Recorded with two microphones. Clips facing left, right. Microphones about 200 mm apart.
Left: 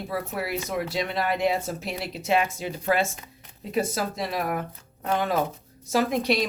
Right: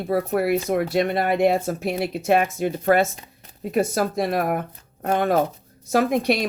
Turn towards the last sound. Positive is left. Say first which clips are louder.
# right 3 dB
turn(degrees=-55)  # may be behind; listen again after turning